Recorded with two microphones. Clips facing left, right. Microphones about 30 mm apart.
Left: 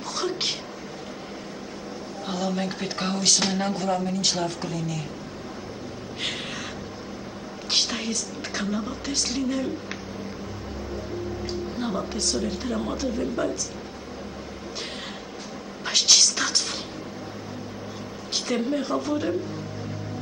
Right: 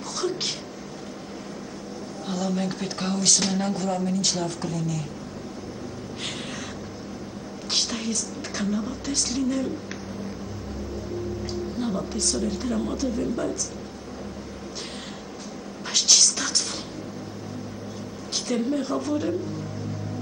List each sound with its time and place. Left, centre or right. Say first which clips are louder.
0.2 s speech: even; centre
2.2 s speech: even; centre
7.7 s speech: left 1 dB; centre
11.4 s speech: even; centre
15.9 s a sound: left 1 dB; centre
18.3 s a woman's voice: even; centre